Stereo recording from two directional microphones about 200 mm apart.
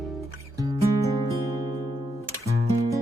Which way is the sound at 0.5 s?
15° right (ahead or behind).